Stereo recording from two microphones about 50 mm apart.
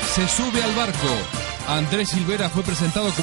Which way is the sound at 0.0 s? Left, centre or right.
Right.